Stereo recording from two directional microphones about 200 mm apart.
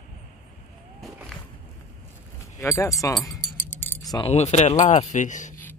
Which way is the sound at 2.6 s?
15° left (ahead or behind).